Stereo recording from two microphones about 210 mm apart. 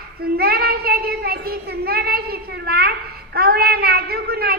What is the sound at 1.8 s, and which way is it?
A child's voice, 45° right (ahead or behind).